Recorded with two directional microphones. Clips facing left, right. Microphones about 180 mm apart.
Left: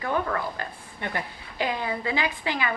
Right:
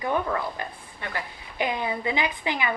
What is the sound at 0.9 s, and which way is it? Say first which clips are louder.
Speech: left 2 dB; 20° left (ahead or behind).